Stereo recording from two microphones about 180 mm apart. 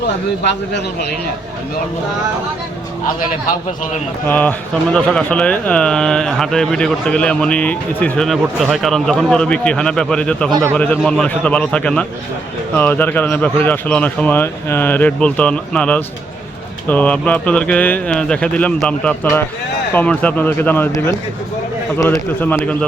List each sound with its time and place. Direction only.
4.3 s speech: 10° left (ahead or behind)
10.5 s speech: 15° right (ahead or behind)
10.8 s speech: 10° left (ahead or behind)